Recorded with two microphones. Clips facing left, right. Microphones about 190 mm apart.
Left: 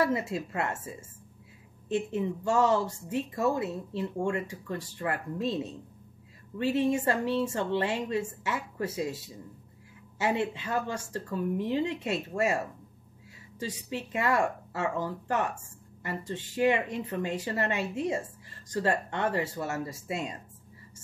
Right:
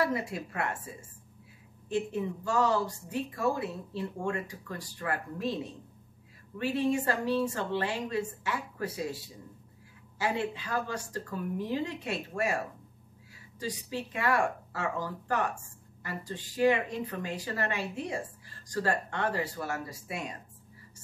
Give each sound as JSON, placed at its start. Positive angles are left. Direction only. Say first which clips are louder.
{"t": 0.0, "sound": "speech", "louder": "left 2 dB", "side_deg": 25}
{"t": 1.9, "sound": "speech", "louder": "left 2 dB", "side_deg": 25}